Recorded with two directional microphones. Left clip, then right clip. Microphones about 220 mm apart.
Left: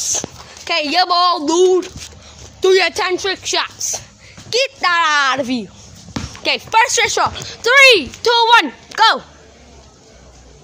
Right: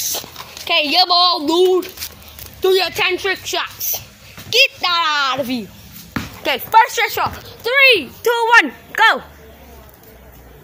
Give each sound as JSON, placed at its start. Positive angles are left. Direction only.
{"t": 0.7, "sound": "a child's voice", "side_deg": 0}
{"t": 2.0, "sound": "a sound", "side_deg": -15}
{"t": 2.6, "sound": "a woman's voice", "side_deg": 30}
{"t": 6.7, "sound": "speech", "side_deg": 20}
{"t": 7.0, "sound": "speech", "side_deg": 40}